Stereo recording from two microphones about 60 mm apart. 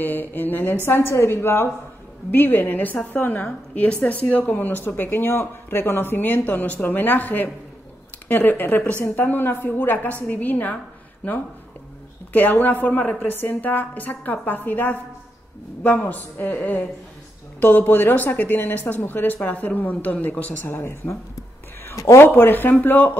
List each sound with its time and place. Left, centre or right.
0.0 s speech: left
0.8 s a woman's voice: left
12.3 s a woman's voice: left
20.6 s speech: left
21.9 s speech: left
22.2 s speech: left